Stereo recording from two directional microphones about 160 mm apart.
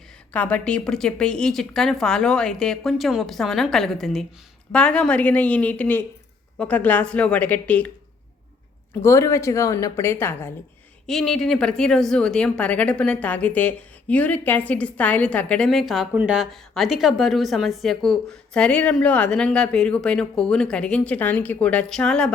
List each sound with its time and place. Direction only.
0.3 s a woman's voice: 10° left (ahead or behind)
9.0 s a woman's voice: 15° left (ahead or behind)
11.0 s a woman's voice: centre (ahead or behind)